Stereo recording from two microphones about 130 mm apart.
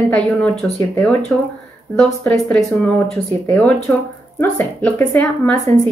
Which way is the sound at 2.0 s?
5° left (ahead or behind).